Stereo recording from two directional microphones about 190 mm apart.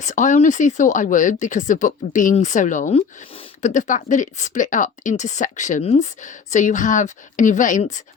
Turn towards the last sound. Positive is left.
turn(degrees=40)  # may be behind; listen again after turning